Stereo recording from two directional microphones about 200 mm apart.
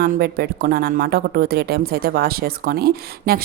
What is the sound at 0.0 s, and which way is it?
Speech, 50° right (ahead or behind).